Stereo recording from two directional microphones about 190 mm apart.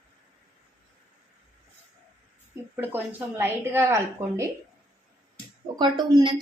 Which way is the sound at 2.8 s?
10° right (ahead or behind).